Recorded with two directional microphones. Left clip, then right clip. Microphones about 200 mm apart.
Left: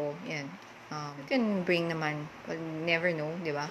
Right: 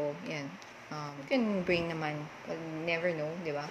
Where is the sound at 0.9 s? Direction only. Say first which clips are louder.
Left 1 dB; 10° left (ahead or behind).